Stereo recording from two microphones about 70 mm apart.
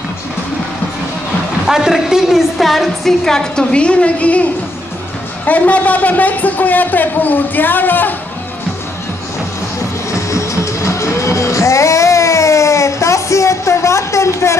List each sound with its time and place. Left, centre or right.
1.7 s a woman's voice: centre; by 8.1 s left
10.3 s music: left